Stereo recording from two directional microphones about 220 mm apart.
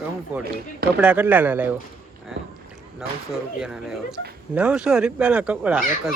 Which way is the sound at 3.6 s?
5° right (ahead or behind).